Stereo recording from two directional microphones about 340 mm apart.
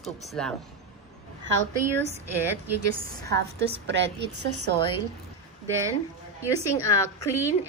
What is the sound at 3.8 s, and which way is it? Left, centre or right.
Speech, right.